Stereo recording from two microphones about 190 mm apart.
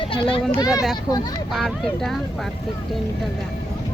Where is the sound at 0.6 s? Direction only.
5° right (ahead or behind).